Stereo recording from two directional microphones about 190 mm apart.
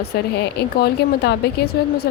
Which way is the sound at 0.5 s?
60° left (ahead or behind).